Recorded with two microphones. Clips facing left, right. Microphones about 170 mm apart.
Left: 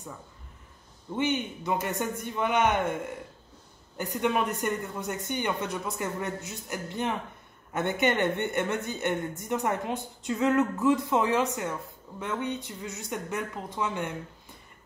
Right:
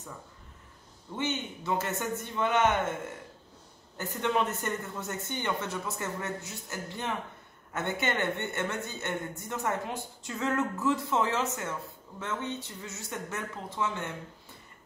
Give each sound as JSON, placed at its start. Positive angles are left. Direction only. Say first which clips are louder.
{"t": 1.1, "sound": "speech", "louder": "left 5 dB", "side_deg": 15}
{"t": 4.0, "sound": "speech", "louder": "left 2 dB", "side_deg": 15}